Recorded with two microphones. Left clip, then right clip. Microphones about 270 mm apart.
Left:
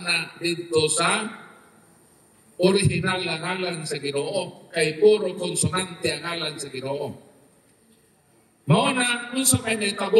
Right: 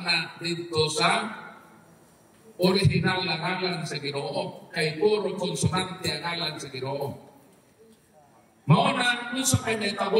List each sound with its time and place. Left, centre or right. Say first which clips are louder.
0.0 s a man's voice: left 2 dB; centre
2.6 s a man's voice: left 3 dB; left
8.6 s a man's voice: left 1 dB; centre